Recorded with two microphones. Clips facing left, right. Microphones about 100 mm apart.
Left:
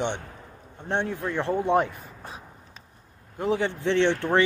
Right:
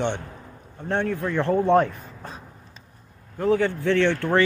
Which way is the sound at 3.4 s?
20° left (ahead or behind).